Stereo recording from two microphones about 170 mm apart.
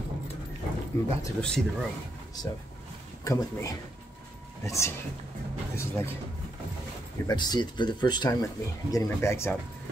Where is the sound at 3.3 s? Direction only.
20° left (ahead or behind).